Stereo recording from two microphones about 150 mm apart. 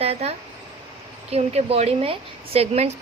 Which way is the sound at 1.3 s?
45° right (ahead or behind).